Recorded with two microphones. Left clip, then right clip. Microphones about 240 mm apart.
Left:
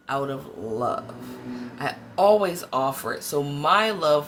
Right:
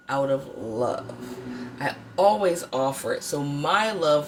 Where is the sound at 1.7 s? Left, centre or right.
Centre.